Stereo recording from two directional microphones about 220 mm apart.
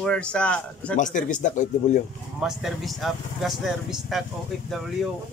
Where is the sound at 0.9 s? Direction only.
35° left (ahead or behind).